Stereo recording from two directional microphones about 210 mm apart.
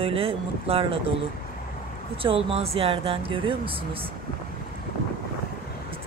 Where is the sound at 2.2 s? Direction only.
25° right (ahead or behind).